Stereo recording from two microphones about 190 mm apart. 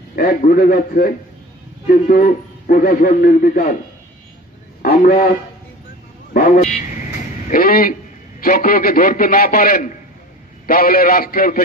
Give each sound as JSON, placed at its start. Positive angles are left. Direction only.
{"t": 0.1, "sound": "a man's voice", "side_deg": 50}
{"t": 4.8, "sound": "speech", "side_deg": 50}
{"t": 6.3, "sound": "vehicle", "side_deg": 45}
{"t": 7.4, "sound": "a man's voice", "side_deg": 50}